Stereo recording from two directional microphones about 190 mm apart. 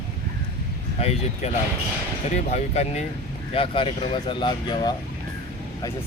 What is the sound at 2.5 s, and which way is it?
Speech, 35° left (ahead or behind).